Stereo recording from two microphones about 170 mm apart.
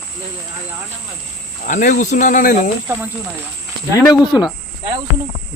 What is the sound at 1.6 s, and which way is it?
Cricket, 50° left (ahead or behind).